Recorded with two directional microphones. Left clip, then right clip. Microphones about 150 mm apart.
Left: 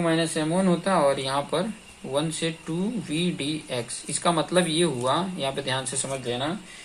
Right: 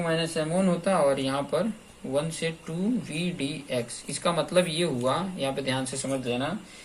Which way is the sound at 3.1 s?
45° left (ahead or behind).